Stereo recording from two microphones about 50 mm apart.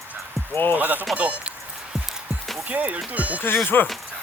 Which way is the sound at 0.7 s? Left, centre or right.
Right.